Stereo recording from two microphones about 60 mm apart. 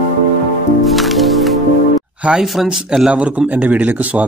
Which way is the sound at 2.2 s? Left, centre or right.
Centre.